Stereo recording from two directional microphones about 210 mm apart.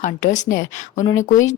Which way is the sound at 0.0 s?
35° left (ahead or behind).